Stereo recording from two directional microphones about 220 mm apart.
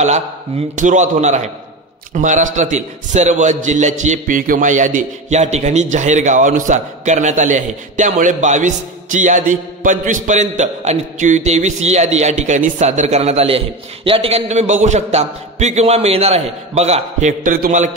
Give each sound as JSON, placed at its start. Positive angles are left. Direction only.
{"t": 0.7, "sound": "a man's voice", "side_deg": -35}